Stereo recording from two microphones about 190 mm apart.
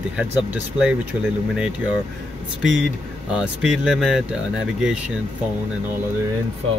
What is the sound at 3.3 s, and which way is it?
Speech, 5° right (ahead or behind).